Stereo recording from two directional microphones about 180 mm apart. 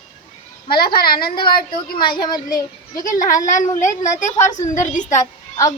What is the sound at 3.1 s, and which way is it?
A woman's voice, 45° left (ahead or behind).